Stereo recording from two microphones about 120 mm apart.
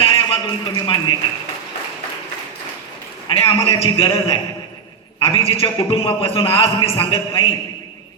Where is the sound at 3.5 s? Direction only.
55° left (ahead or behind).